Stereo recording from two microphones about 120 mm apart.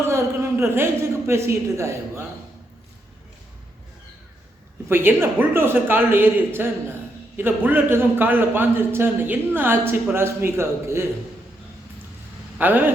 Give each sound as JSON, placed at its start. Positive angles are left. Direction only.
{"t": 0.0, "sound": "a sound", "side_deg": -20}
{"t": 1.3, "sound": "a man's voice", "side_deg": -20}
{"t": 4.9, "sound": "a man's voice", "side_deg": -20}
{"t": 12.5, "sound": "speech", "side_deg": -15}